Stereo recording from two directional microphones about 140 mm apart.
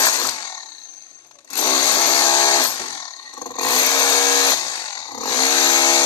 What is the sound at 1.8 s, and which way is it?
Music, 30° left (ahead or behind).